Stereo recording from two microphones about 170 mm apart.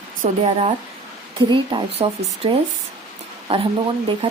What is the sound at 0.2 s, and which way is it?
Speech, 40° right (ahead or behind).